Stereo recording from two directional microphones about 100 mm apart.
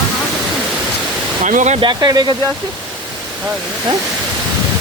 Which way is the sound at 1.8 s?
40° right (ahead or behind).